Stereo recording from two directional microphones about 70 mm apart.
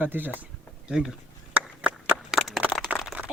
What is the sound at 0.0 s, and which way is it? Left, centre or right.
Speech, right.